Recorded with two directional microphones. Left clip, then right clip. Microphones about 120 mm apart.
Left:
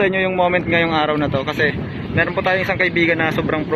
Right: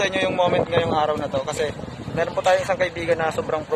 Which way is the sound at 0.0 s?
25° right (ahead or behind).